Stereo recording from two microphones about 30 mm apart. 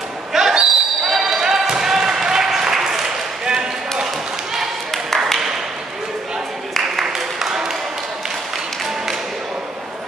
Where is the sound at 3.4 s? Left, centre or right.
Right.